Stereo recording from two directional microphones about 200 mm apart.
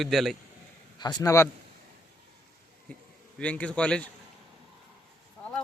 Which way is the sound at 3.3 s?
5° left (ahead or behind).